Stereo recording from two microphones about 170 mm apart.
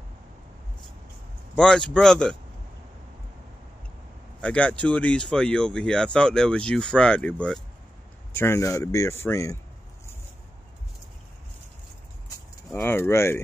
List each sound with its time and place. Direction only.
1.5 s speech: 5° left (ahead or behind)
4.4 s speech: 5° left (ahead or behind)
12.6 s a sound: 5° left (ahead or behind)
12.9 s speech: 15° left (ahead or behind)